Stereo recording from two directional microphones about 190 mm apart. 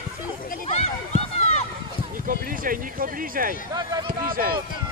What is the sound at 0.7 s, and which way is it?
Run, 35° left (ahead or behind).